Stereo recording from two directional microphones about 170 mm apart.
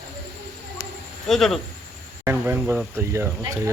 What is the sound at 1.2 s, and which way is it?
Speech, centre (ahead or behind).